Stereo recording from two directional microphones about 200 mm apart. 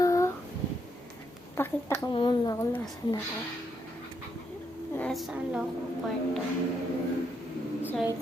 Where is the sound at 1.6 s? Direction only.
10° left (ahead or behind).